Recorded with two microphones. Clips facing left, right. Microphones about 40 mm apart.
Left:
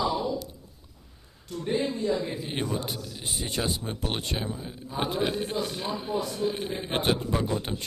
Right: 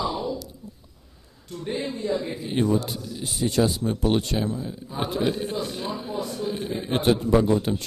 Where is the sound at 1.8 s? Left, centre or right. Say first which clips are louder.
Right 2 dB; centre.